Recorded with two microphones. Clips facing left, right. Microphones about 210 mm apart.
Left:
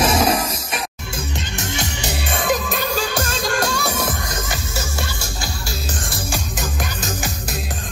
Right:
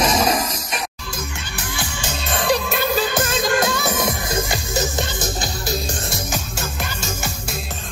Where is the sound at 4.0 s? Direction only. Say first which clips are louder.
Right 3 dB; 10° right (ahead or behind).